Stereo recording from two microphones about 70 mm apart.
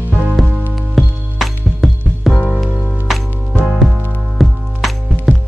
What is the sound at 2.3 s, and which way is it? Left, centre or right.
Music, centre.